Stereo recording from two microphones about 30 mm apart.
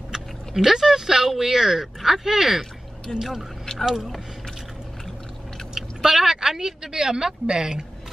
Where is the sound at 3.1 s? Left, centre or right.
Left.